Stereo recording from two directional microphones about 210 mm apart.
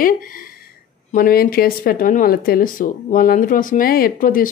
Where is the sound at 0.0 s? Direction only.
40° left (ahead or behind).